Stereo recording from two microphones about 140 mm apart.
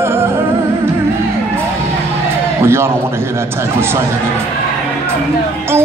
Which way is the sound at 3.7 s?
15° right (ahead or behind).